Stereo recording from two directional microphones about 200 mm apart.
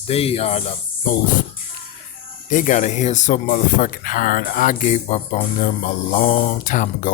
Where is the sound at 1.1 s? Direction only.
40° left (ahead or behind).